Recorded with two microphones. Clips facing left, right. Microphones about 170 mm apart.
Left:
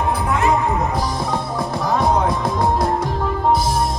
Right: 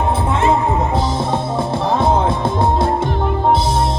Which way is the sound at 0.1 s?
25° right (ahead or behind).